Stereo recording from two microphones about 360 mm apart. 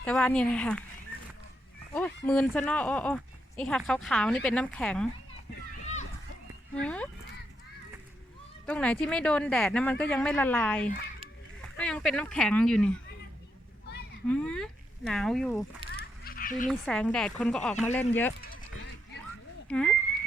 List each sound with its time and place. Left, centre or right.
0.0 s speech: centre
1.9 s speech: centre
6.7 s speech: centre
8.6 s speech: centre
14.3 s speech: centre
16.2 s duck: left
16.6 s speech: centre
18.5 s a sound: left
19.6 s speech: centre